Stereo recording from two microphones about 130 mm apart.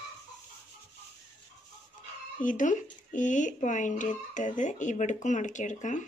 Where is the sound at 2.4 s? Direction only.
80° left.